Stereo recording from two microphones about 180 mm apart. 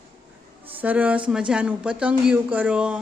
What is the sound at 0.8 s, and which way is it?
Speech, 10° right (ahead or behind).